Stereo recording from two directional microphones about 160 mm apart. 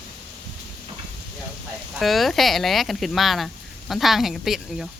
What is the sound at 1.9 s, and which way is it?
Speech, centre (ahead or behind).